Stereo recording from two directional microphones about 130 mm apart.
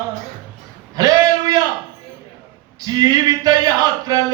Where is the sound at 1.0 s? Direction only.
30° right (ahead or behind).